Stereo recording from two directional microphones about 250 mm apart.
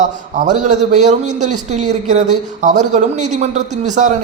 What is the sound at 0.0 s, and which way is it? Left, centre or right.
A man's voice, right.